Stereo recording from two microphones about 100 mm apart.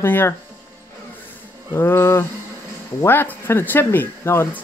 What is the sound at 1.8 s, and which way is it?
Speech, 25° left (ahead or behind).